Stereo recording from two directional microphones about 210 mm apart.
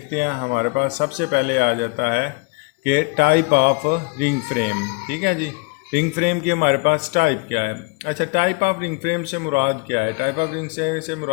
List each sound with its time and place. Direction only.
0.1 s a man's voice: 45° right (ahead or behind)